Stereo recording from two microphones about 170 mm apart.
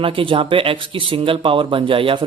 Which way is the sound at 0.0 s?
30° right (ahead or behind).